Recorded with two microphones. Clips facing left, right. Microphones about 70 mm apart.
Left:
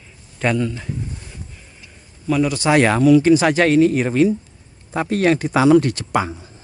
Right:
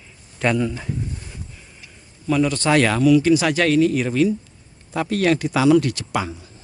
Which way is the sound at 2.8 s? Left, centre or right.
Left.